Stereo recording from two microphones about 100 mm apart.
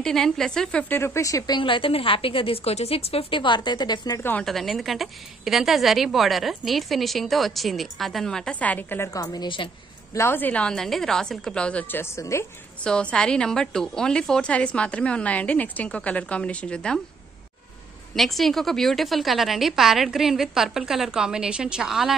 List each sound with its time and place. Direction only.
0.0 s a woman's voice: 5° left (ahead or behind)
0.9 s a woman's voice: 25° left (ahead or behind)
1.6 s a woman's voice: 60° left (ahead or behind); by 4.2 s 45° left (ahead or behind)
4.2 s a woman's voice: 20° left (ahead or behind)
4.5 s a woman's voice: centre (ahead or behind); by 9.1 s 20° left (ahead or behind)
9.1 s a woman's voice: 40° left (ahead or behind)
10.1 s a woman's voice: 25° left (ahead or behind)
12.0 s a woman's voice: 30° left (ahead or behind)
12.8 s a woman's voice: 10° left (ahead or behind)
18.1 s a woman's voice: centre (ahead or behind)